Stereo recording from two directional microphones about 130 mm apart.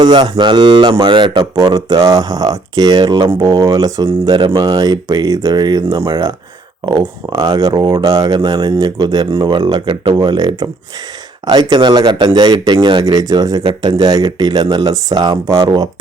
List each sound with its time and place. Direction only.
0.0 s speech: 35° right (ahead or behind)
4.3 s speech: 40° right (ahead or behind)